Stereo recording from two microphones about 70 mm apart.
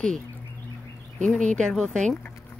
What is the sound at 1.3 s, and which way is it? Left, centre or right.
Speech, centre.